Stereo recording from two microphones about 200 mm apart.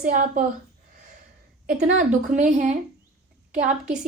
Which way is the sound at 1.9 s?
35° right (ahead or behind).